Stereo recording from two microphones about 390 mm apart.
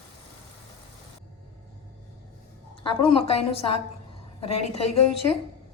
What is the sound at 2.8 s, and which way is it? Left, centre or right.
A woman's voice, centre.